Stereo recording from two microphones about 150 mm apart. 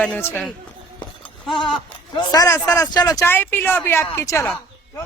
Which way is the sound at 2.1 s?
25° left (ahead or behind).